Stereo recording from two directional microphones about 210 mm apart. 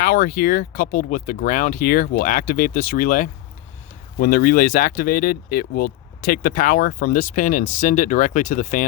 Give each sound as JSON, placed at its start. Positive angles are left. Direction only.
{"t": 0.0, "sound": "speech", "side_deg": 45}